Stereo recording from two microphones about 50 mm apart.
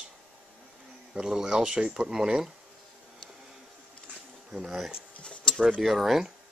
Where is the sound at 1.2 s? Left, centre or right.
Centre.